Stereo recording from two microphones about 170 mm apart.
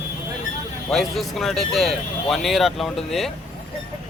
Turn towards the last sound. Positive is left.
turn(degrees=0)  # may be behind; listen again after turning